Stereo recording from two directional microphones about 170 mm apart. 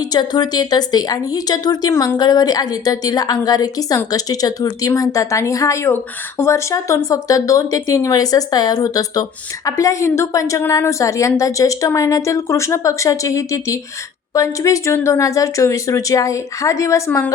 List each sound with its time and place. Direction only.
0.0 s speech: 25° left (ahead or behind)